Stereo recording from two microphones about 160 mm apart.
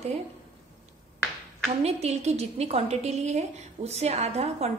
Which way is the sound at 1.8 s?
40° right (ahead or behind).